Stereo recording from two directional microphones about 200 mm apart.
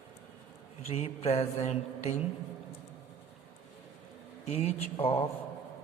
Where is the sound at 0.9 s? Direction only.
30° left (ahead or behind).